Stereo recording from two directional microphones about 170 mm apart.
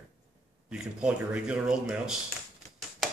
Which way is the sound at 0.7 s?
5° right (ahead or behind).